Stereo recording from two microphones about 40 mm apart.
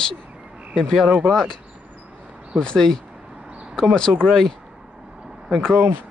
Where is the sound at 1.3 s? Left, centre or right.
Centre.